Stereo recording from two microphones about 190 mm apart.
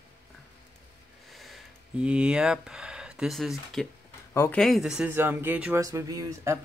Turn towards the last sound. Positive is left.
turn(degrees=-15)  # may be behind; listen again after turning